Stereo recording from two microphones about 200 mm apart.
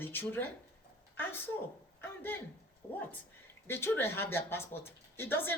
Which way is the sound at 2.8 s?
15° left (ahead or behind).